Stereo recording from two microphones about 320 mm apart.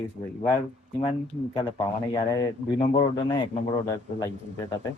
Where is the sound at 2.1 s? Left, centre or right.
Centre.